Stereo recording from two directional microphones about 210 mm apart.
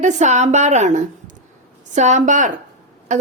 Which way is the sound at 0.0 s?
35° right (ahead or behind).